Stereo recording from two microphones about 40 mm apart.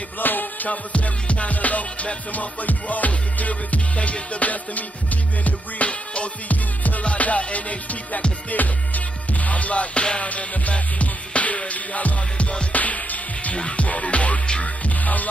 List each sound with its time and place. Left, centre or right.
0.2 s music: left
6.5 s music: left
12.7 s music: left